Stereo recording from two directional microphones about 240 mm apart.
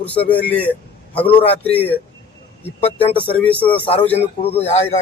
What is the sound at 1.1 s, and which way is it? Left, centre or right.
Speech, left.